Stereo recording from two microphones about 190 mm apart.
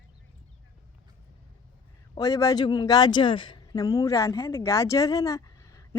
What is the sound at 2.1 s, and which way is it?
A woman's voice, 20° left (ahead or behind).